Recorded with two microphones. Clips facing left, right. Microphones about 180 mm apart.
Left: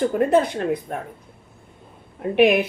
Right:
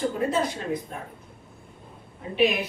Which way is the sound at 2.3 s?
60° left (ahead or behind).